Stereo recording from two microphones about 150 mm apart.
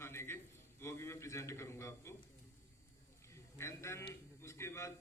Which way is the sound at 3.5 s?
20° left (ahead or behind).